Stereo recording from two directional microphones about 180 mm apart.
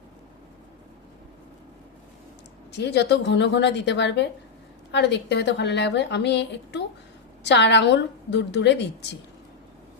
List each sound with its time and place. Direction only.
2.7 s a woman's voice: 70° left (ahead or behind)